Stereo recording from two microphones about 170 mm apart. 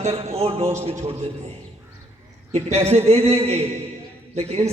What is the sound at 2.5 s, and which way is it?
A man's voice, 40° right (ahead or behind).